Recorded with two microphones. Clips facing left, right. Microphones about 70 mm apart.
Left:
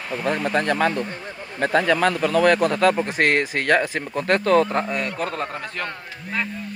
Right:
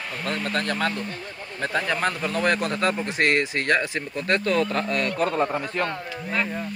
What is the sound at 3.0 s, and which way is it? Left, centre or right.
Speech, left.